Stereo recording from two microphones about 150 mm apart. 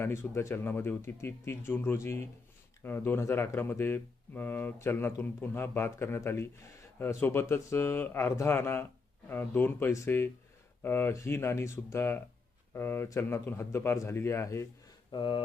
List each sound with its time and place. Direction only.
0.0 s speech: 15° left (ahead or behind)
15.1 s speech: 35° left (ahead or behind)